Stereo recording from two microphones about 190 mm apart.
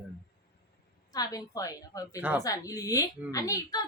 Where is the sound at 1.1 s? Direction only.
20° left (ahead or behind).